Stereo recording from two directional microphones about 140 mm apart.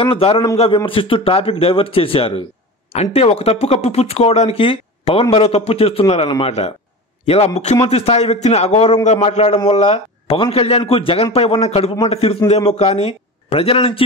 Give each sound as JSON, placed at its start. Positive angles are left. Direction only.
{"t": 0.0, "sound": "speech", "side_deg": 40}